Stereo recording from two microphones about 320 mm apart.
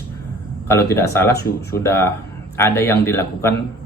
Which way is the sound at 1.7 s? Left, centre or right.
Centre.